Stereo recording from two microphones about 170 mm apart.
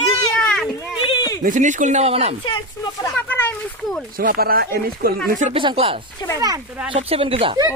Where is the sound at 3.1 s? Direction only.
10° left (ahead or behind).